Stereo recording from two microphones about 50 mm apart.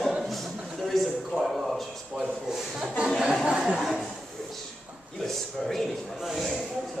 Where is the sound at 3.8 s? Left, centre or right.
Centre.